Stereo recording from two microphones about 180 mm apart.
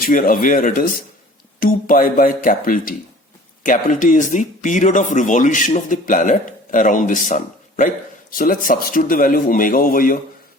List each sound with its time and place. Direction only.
0.0 s speech: 50° left (ahead or behind)